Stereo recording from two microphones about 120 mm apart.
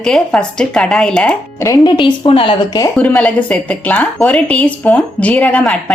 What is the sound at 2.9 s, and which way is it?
Speech, 10° left (ahead or behind).